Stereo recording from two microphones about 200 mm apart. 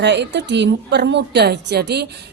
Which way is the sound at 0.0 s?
60° right (ahead or behind).